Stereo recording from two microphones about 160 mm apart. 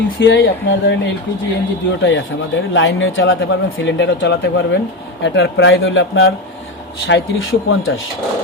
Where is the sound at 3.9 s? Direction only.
90° left.